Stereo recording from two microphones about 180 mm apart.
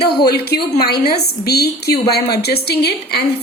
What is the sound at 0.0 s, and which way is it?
A woman's voice, 60° left (ahead or behind).